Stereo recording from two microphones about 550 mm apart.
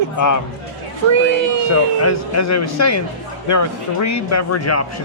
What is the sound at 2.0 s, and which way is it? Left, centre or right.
Speech, left.